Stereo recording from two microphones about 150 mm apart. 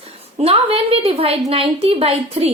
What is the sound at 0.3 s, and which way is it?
A woman's voice, 40° right (ahead or behind).